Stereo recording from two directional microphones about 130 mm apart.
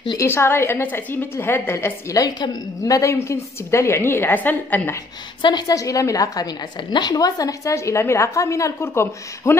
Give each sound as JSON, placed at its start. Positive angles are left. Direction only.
{"t": 0.2, "sound": "a woman's voice", "side_deg": 20}
{"t": 5.4, "sound": "a woman's voice", "side_deg": 35}